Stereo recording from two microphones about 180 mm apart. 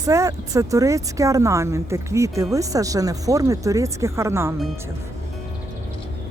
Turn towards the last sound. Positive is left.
turn(degrees=-15)  # may be behind; listen again after turning